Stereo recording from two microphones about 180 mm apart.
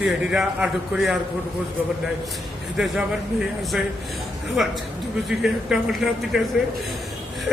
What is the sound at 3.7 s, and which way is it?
Speech, 5° right (ahead or behind).